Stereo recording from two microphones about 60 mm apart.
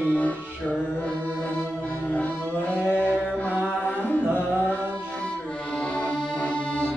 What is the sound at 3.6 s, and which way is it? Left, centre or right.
Music, left.